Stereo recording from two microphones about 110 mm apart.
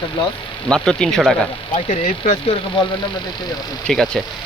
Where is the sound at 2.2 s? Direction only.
90° left.